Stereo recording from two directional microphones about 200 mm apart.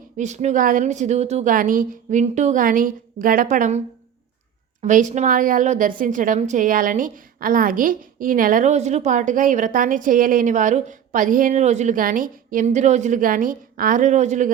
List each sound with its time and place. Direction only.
0.2 s a woman's voice: 35° right (ahead or behind)